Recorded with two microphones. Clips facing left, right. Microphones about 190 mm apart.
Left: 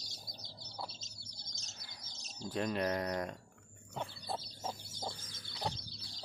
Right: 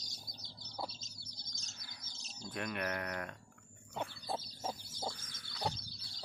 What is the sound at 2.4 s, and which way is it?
Speech, 30° left (ahead or behind).